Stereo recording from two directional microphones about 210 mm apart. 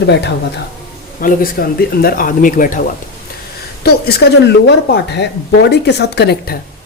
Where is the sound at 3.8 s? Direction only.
50° left (ahead or behind).